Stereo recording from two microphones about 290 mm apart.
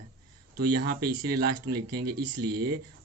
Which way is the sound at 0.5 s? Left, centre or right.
Right.